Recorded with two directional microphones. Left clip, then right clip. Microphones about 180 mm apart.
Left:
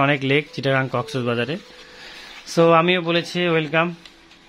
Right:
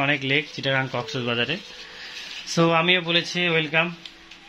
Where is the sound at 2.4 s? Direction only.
60° left (ahead or behind).